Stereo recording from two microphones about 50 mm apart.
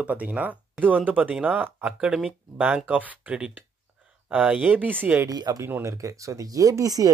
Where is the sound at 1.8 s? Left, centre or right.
Centre.